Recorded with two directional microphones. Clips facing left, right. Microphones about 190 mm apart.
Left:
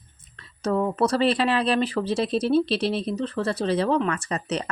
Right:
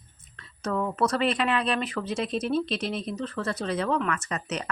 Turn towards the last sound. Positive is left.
turn(degrees=35)  # may be behind; listen again after turning